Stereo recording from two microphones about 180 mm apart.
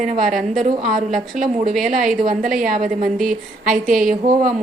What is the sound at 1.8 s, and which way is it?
A woman's voice, 50° right (ahead or behind).